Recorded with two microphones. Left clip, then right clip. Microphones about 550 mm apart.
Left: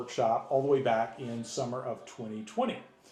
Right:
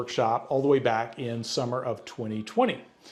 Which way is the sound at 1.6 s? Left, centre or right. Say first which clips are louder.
Right 4 dB; right.